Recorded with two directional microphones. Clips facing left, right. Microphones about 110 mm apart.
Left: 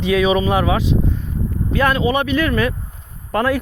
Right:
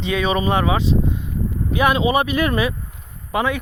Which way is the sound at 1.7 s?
15° right (ahead or behind).